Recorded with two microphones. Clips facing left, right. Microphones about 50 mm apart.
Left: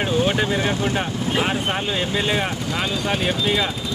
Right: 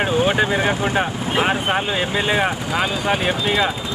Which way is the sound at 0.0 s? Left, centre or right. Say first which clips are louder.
Right 3 dB; centre.